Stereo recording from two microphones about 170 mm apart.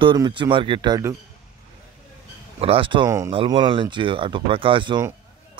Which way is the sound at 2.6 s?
30° right (ahead or behind).